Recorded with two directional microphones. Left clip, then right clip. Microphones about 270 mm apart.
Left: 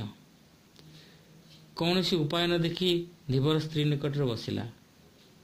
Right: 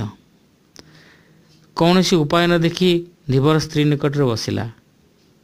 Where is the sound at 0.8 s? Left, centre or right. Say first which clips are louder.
Right 12 dB; right.